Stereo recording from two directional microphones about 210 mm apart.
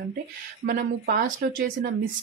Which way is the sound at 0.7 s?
40° right (ahead or behind).